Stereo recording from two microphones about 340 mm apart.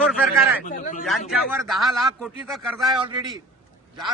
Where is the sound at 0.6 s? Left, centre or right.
Left.